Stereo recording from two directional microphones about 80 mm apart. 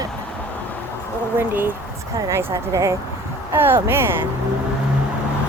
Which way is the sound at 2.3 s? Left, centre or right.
Right.